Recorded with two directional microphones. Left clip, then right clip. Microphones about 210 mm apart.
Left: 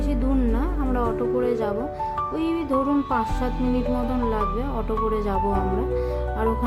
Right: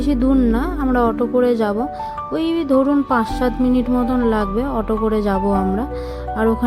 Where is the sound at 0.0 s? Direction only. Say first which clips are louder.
Right 8 dB; 25° right (ahead or behind).